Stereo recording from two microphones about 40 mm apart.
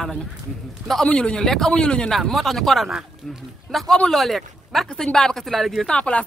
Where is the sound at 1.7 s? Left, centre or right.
Left.